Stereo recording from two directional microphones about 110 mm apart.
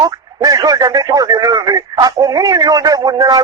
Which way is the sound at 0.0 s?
35° right (ahead or behind).